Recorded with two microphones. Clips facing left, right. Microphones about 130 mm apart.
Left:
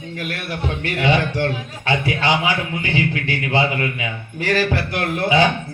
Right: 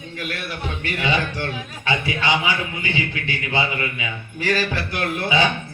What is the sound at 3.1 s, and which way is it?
Speech, 50° left (ahead or behind).